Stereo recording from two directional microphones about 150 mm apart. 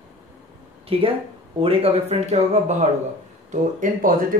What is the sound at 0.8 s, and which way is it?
Speech, 40° right (ahead or behind).